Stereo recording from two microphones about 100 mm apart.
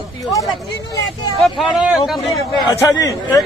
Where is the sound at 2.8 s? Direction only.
35° left (ahead or behind).